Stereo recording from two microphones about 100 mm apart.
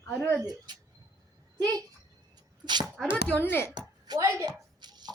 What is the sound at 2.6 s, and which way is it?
Speech, 45° right (ahead or behind).